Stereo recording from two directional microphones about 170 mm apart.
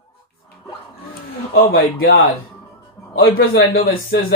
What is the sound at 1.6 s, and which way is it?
Speech, 65° left (ahead or behind).